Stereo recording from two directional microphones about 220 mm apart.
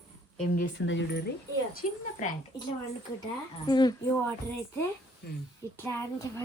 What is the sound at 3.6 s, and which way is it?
Speech, 20° left (ahead or behind).